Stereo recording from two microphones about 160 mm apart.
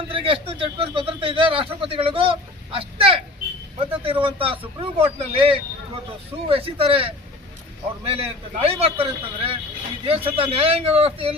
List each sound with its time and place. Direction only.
0.1 s speech: 35° right (ahead or behind)